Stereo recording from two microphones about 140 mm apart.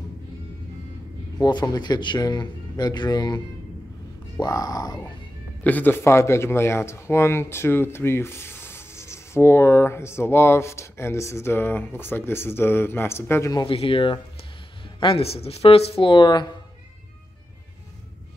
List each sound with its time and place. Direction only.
1.4 s speech: 30° left (ahead or behind)
5.6 s speech: 10° left (ahead or behind)
13.7 s speech: 40° left (ahead or behind)